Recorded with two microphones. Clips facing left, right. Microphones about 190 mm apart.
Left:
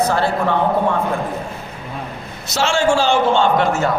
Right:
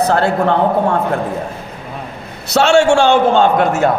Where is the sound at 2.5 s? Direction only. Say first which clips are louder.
Right 6 dB; 65° right (ahead or behind).